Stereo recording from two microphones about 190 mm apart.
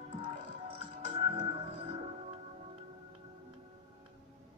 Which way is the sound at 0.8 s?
30° right (ahead or behind).